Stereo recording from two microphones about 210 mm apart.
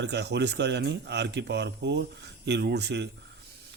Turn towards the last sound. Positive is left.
turn(degrees=-55)  # may be behind; listen again after turning